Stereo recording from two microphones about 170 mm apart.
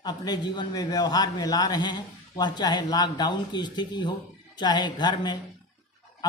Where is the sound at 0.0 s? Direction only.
25° left (ahead or behind).